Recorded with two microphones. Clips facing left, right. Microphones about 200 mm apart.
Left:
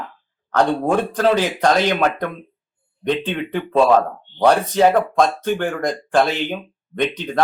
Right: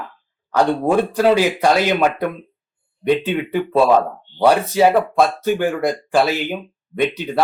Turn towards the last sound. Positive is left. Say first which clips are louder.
# right 2 dB
turn(degrees=-10)  # may be behind; listen again after turning